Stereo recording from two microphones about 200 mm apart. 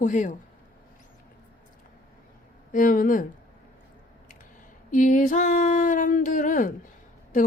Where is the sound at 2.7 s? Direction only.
45° left (ahead or behind).